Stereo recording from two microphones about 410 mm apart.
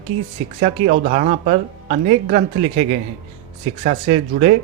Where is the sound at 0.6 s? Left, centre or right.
Right.